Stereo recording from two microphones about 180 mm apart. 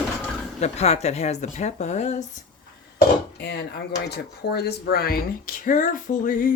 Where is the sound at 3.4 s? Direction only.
65° left (ahead or behind); by 6.5 s 45° left (ahead or behind).